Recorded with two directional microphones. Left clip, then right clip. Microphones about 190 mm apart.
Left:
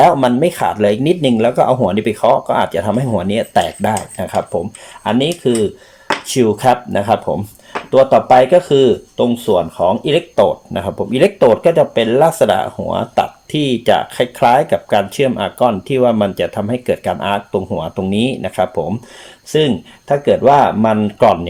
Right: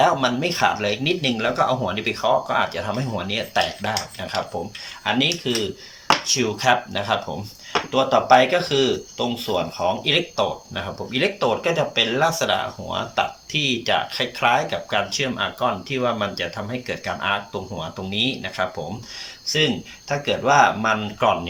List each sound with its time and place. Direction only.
0.0 s speech: 40° left (ahead or behind)
20.1 s speech: 35° left (ahead or behind)